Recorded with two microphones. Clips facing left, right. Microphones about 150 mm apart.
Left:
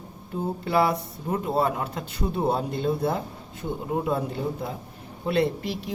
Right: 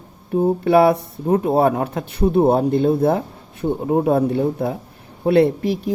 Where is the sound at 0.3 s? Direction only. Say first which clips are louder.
Right 10 dB; 60° right (ahead or behind).